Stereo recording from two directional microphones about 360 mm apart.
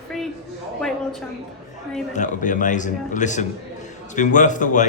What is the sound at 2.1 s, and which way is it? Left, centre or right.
A man's voice, left.